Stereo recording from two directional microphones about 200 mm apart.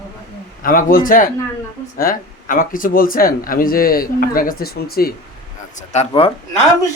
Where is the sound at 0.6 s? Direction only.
45° left (ahead or behind).